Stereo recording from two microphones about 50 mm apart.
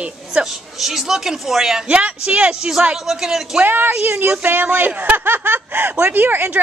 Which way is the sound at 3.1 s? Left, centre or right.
Centre.